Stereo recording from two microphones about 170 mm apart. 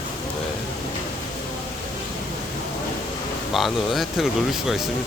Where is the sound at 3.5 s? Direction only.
Centre (ahead or behind).